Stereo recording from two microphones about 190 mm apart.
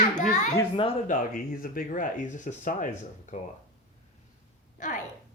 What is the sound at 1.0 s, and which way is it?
Speech, 45° left (ahead or behind).